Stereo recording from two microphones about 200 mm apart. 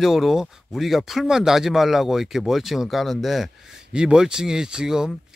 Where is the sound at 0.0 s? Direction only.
Centre (ahead or behind).